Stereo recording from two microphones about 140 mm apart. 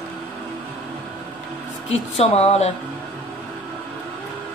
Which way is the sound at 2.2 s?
50° left (ahead or behind).